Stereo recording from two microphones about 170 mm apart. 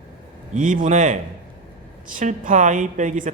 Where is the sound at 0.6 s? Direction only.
50° right (ahead or behind).